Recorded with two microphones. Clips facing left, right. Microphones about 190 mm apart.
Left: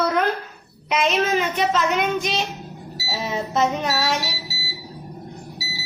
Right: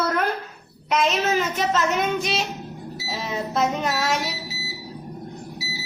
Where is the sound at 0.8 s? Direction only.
Centre (ahead or behind).